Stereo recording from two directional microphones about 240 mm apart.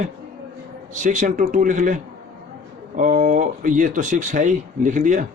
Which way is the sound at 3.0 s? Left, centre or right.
Right.